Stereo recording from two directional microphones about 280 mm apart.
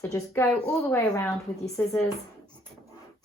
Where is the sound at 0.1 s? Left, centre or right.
Centre.